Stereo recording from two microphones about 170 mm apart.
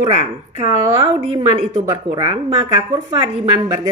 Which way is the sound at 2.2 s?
35° right (ahead or behind).